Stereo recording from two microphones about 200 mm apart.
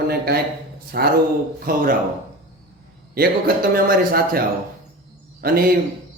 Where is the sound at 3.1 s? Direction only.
50° right (ahead or behind).